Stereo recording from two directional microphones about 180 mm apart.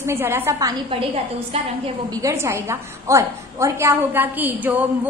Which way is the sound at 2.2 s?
15° right (ahead or behind).